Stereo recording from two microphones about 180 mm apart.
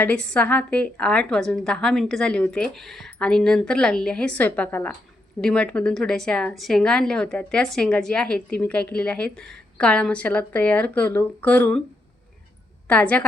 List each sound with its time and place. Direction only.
0.0 s a woman's voice: 5° left (ahead or behind)
12.9 s speech: 5° left (ahead or behind)